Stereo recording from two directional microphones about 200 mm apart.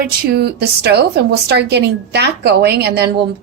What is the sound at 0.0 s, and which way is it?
A woman's voice, 50° right (ahead or behind).